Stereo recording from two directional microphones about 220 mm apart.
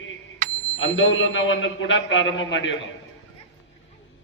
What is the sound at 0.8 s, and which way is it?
A man's voice, 60° left (ahead or behind).